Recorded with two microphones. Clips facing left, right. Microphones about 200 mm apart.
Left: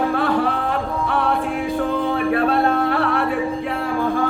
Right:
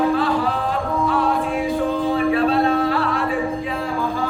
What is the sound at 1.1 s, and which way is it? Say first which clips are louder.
A capella: left 1 dB; 60° left (ahead or behind).